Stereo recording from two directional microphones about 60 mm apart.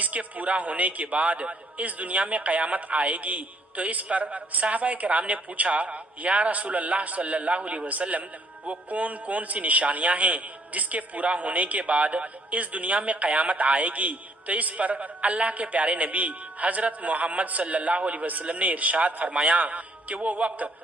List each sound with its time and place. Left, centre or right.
0.0 s a man's voice: right